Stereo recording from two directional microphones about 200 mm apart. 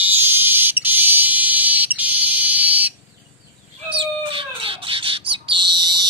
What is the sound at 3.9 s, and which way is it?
Bird, 25° right (ahead or behind).